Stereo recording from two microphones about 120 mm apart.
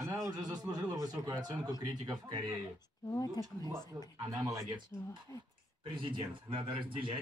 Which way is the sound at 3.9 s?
25° right (ahead or behind).